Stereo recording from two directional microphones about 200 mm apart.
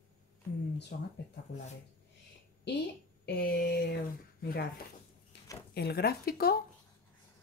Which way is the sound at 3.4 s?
45° left (ahead or behind).